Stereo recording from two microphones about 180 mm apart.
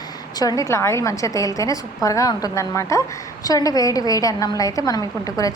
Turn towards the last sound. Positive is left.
turn(degrees=20)  # may be behind; listen again after turning